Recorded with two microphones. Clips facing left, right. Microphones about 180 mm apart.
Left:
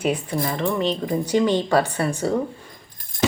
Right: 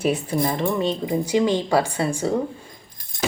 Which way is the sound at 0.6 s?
10° right (ahead or behind).